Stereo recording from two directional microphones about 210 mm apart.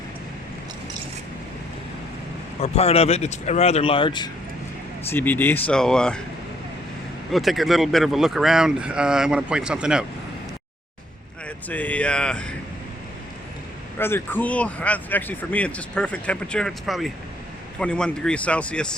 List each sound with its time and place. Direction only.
2.6 s speech: 30° left (ahead or behind)
5.1 s speech: 10° left (ahead or behind)
7.3 s speech: centre (ahead or behind)
11.4 s speech: 5° left (ahead or behind)
14.0 s speech: 10° left (ahead or behind)